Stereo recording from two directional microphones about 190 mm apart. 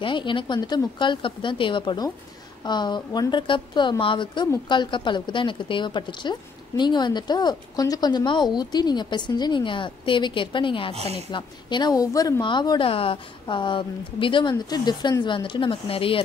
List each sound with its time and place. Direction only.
0.0 s a woman's voice: 25° left (ahead or behind)
11.0 s a woman's voice: 35° right (ahead or behind)
11.3 s a woman's voice: 25° left (ahead or behind)